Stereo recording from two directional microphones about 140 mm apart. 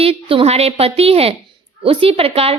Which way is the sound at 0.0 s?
40° right (ahead or behind).